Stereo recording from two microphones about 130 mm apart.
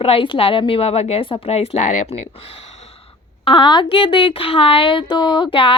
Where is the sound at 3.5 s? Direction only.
35° left (ahead or behind).